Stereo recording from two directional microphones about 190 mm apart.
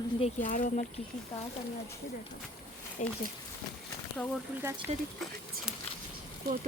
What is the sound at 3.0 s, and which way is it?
Speech, 40° left (ahead or behind).